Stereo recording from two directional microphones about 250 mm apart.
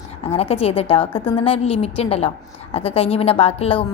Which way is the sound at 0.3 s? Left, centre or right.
Left.